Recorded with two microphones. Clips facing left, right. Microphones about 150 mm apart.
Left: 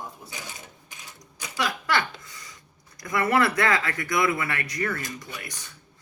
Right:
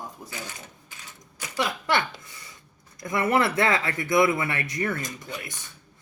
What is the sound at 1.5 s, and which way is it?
A woman's voice, 25° right (ahead or behind).